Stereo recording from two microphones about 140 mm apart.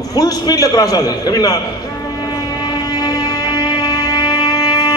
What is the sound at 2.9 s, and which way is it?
Music, 30° left (ahead or behind).